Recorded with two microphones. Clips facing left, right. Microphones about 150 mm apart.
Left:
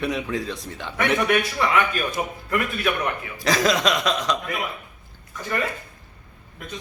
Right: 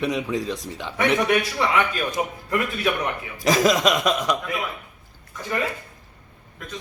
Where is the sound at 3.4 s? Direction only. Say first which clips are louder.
Right 2 dB; 5° right (ahead or behind).